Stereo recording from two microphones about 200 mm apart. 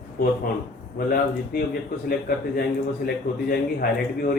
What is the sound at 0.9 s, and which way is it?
A man's voice, 45° left (ahead or behind).